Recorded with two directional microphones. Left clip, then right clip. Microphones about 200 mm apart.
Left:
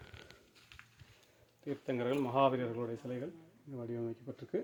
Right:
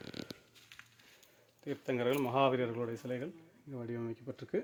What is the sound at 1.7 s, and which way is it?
Speech, 30° right (ahead or behind).